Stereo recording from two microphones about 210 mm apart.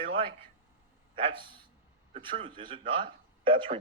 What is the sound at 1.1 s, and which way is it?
A man's voice, 25° right (ahead or behind).